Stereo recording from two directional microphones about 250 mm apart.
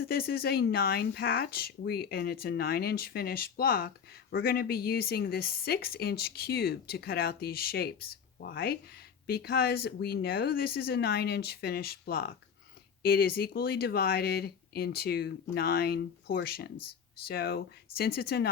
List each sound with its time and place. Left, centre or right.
0.0 s speech: left